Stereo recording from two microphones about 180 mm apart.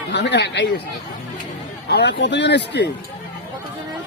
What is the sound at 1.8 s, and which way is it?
Speech, 70° left (ahead or behind).